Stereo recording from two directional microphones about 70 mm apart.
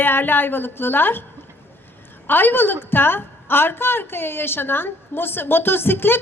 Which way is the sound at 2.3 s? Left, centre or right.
Left.